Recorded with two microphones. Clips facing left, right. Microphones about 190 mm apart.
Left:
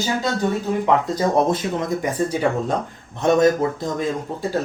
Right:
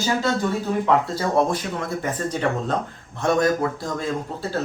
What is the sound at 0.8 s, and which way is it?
Speech, 15° left (ahead or behind).